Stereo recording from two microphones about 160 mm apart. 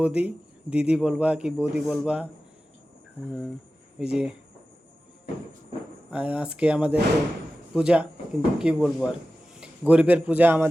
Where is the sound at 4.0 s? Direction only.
5° right (ahead or behind).